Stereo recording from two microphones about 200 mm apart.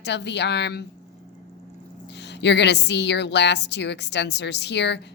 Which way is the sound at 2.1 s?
60° left (ahead or behind).